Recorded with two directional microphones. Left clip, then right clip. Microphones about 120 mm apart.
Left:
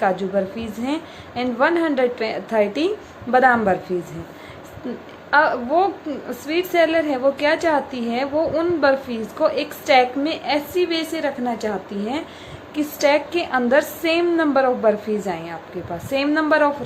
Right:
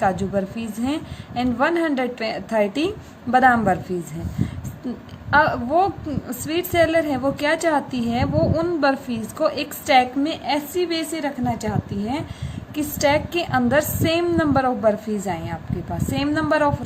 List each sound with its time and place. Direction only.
0.0 s a woman's voice: 40° right (ahead or behind)
5.3 s a woman's voice: 45° right (ahead or behind)